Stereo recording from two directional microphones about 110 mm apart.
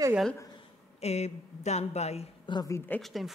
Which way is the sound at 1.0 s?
85° left.